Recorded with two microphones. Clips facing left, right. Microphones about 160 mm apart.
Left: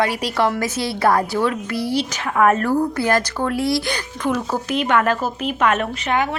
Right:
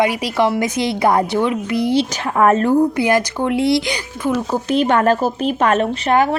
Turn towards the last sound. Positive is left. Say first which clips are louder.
# right 6 dB
turn(degrees=-35)  # may be behind; listen again after turning